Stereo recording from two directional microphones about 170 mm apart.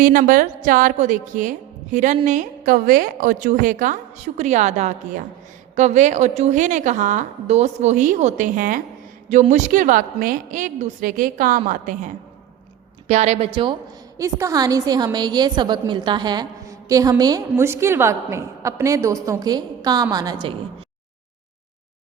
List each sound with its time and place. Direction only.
0.0 s speech: 50° right (ahead or behind); by 13.7 s 30° right (ahead or behind)
14.2 s a woman's voice: 20° right (ahead or behind)